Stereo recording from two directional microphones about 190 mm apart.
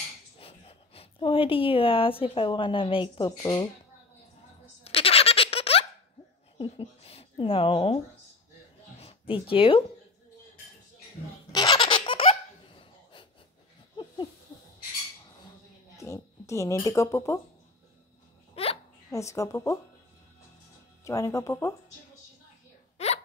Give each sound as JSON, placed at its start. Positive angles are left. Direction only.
{"t": 0.4, "sound": "speech", "side_deg": 30}
{"t": 4.8, "sound": "a sound", "side_deg": 30}
{"t": 6.6, "sound": "speech", "side_deg": 30}
{"t": 9.0, "sound": "speech", "side_deg": 30}
{"t": 11.5, "sound": "laughter", "side_deg": 20}
{"t": 16.0, "sound": "speech", "side_deg": 15}
{"t": 18.5, "sound": "hiccup", "side_deg": 30}
{"t": 19.1, "sound": "speech", "side_deg": 15}
{"t": 21.0, "sound": "speech", "side_deg": 15}
{"t": 22.9, "sound": "hiccup", "side_deg": 35}